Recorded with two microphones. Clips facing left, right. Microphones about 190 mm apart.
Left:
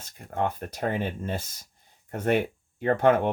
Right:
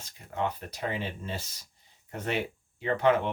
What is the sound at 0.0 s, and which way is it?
Speech, 50° left (ahead or behind).